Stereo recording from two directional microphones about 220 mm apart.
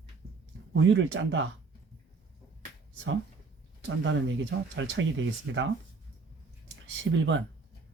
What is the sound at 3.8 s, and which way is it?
Speech, 55° right (ahead or behind).